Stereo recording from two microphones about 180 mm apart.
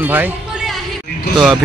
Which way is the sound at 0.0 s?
10° right (ahead or behind).